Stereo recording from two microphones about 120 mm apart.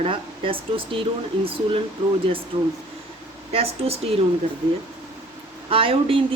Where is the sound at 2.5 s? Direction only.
50° right (ahead or behind).